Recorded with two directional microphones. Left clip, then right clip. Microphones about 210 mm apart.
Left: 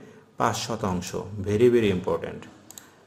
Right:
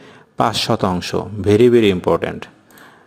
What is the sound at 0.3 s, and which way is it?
A man's voice, 40° right (ahead or behind).